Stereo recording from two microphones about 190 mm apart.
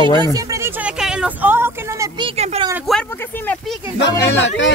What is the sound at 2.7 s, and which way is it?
Speech, centre (ahead or behind).